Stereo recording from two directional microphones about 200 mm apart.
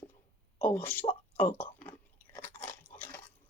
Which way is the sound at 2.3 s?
10° left (ahead or behind).